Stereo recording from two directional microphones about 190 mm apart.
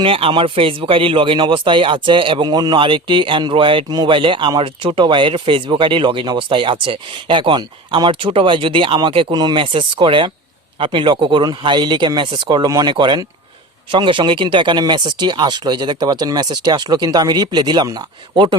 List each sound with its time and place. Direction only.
0.0 s speech: 30° right (ahead or behind)